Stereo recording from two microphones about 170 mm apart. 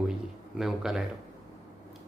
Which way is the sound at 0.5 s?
5° right (ahead or behind).